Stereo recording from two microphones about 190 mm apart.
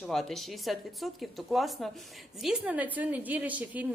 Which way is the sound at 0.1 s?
Centre (ahead or behind).